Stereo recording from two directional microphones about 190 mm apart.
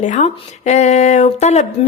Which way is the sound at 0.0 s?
40° left (ahead or behind).